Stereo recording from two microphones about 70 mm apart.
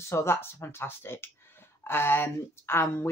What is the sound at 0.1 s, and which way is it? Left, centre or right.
Speech, left.